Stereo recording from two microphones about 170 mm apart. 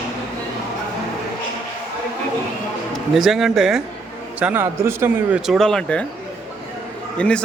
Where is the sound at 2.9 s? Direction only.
Centre (ahead or behind).